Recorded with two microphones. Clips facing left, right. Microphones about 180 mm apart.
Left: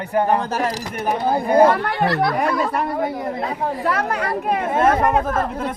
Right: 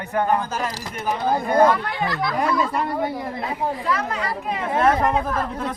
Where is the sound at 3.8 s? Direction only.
60° left (ahead or behind).